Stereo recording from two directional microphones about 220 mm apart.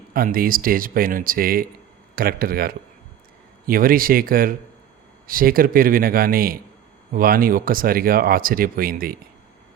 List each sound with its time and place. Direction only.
0.1 s speech: 40° right (ahead or behind)